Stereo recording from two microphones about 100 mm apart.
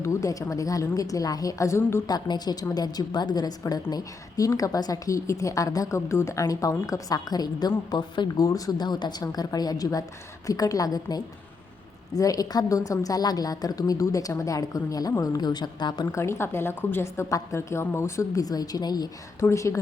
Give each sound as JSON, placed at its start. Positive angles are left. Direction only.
{"t": 0.0, "sound": "a woman's voice", "side_deg": 30}
{"t": 2.0, "sound": "a woman's voice", "side_deg": 45}
{"t": 8.4, "sound": "a woman's voice", "side_deg": 35}
{"t": 16.1, "sound": "speech", "side_deg": 25}
{"t": 19.4, "sound": "a woman's voice", "side_deg": 30}